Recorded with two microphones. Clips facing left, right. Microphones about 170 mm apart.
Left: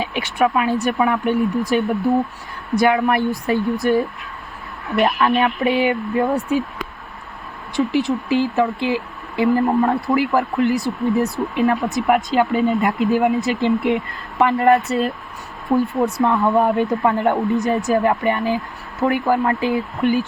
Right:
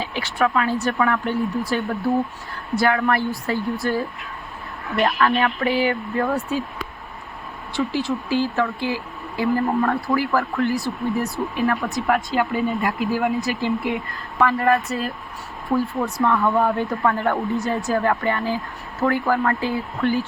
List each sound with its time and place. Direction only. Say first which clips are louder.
0.0 s speech: left 3 dB; 20° left (ahead or behind)
7.7 s speech: left 4 dB; 20° left (ahead or behind)